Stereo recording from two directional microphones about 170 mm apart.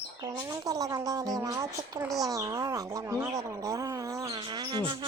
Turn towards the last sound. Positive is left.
turn(degrees=-25)  # may be behind; listen again after turning